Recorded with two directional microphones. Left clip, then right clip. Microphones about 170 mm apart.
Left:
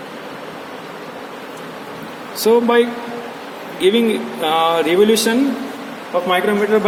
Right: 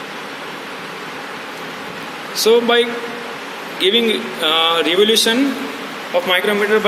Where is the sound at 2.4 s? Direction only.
45° left (ahead or behind).